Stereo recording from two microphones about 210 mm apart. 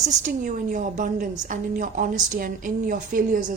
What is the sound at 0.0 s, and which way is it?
A woman's voice, 35° right (ahead or behind).